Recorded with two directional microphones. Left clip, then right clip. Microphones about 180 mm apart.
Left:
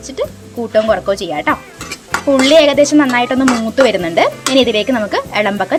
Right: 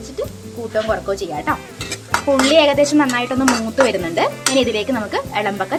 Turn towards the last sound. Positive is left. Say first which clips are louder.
# left 5 dB
turn(degrees=30)  # may be behind; listen again after turning